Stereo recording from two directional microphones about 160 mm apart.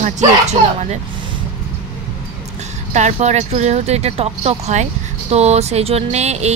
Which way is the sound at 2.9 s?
45° right (ahead or behind).